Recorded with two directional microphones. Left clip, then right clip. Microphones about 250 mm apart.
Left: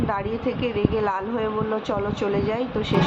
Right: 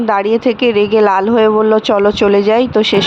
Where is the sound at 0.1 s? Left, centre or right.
Right.